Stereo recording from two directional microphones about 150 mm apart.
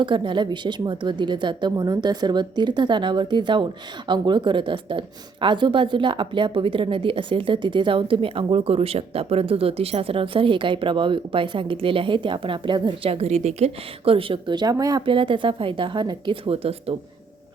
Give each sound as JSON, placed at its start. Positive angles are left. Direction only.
{"t": 0.0, "sound": "a woman's voice", "side_deg": -35}